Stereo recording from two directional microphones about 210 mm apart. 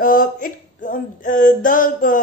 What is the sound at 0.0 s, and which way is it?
Speech, 40° left (ahead or behind).